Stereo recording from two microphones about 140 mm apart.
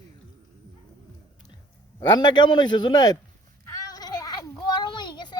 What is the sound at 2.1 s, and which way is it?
A man's voice, 30° left (ahead or behind).